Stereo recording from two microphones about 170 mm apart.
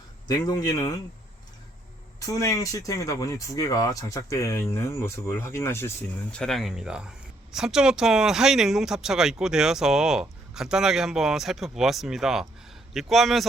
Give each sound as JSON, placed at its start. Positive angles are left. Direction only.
{"t": 0.3, "sound": "speech", "side_deg": 20}
{"t": 2.1, "sound": "speech", "side_deg": 20}
{"t": 6.3, "sound": "speech", "side_deg": 0}